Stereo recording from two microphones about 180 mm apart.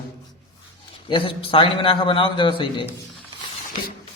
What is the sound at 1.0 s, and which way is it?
A man's voice, 30° left (ahead or behind).